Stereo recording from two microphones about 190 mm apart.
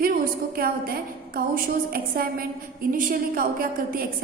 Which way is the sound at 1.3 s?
50° right (ahead or behind).